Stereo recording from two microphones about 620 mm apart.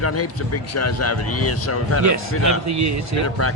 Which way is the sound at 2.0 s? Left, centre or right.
Right.